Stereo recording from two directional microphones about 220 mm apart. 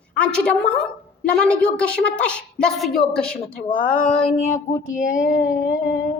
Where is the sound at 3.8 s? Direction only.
35° left (ahead or behind).